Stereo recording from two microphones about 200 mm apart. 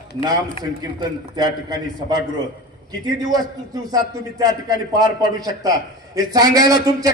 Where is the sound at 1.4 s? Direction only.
20° right (ahead or behind).